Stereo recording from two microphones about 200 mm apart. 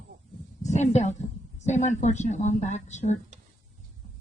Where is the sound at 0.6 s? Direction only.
35° left (ahead or behind).